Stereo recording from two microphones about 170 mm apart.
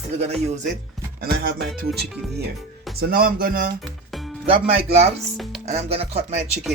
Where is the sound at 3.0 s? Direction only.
60° right (ahead or behind).